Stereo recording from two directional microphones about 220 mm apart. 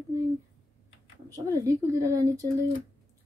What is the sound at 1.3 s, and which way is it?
A woman's voice, 15° right (ahead or behind).